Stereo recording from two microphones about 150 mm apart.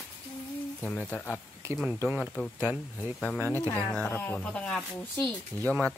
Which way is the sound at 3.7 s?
10° left (ahead or behind).